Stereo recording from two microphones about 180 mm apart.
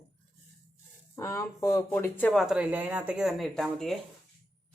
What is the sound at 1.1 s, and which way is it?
Speech, 15° left (ahead or behind).